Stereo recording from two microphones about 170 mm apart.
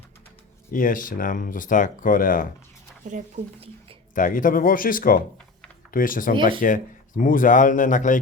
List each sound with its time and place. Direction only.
0.7 s speech: 50° left (ahead or behind)
3.0 s speech: 50° right (ahead or behind)
4.1 s speech: 50° left (ahead or behind)